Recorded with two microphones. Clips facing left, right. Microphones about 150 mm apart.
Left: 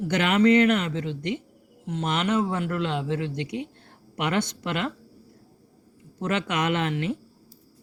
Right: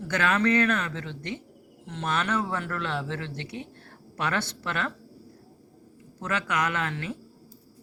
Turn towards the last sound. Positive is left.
turn(degrees=20)  # may be behind; listen again after turning